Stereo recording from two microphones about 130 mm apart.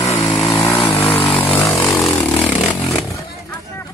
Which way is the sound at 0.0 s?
25° left (ahead or behind).